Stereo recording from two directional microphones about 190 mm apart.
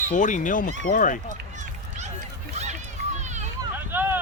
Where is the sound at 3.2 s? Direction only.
40° right (ahead or behind).